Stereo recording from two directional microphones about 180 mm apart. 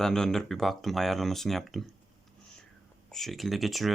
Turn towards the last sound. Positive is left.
turn(degrees=0)  # may be behind; listen again after turning